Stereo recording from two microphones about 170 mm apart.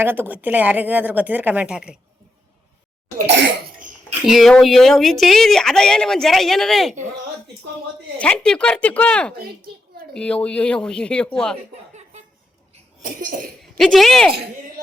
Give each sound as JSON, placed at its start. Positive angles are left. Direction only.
{"t": 0.0, "sound": "speech", "side_deg": -10}
{"t": 3.2, "sound": "cough", "side_deg": -90}
{"t": 3.8, "sound": "dishes", "side_deg": -50}
{"t": 4.3, "sound": "a woman's voice", "side_deg": 0}
{"t": 8.2, "sound": "a woman's voice", "side_deg": 5}
{"t": 13.0, "sound": "cough", "side_deg": -55}
{"t": 13.7, "sound": "a woman's voice", "side_deg": 0}